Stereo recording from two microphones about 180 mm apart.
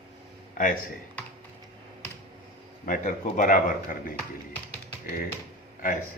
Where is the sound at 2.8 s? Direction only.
45° left (ahead or behind).